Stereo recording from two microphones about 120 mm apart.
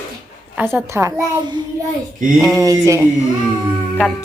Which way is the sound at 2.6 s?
25° right (ahead or behind).